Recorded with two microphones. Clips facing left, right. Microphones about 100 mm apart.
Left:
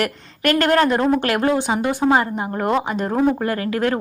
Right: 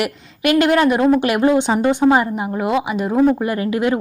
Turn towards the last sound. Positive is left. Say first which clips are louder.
# right 2 dB
turn(degrees=-15)  # may be behind; listen again after turning